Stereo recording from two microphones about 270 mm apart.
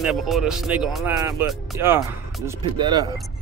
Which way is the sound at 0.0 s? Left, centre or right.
Centre.